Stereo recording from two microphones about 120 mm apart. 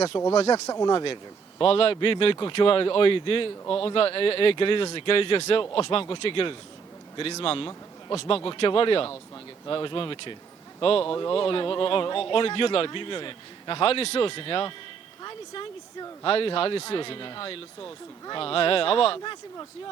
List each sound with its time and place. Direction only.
0.4 s speech: 30° left (ahead or behind)
1.0 s speech: 45° left (ahead or behind)